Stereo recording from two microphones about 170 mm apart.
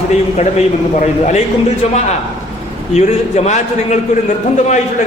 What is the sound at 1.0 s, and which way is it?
Speech, 40° left (ahead or behind).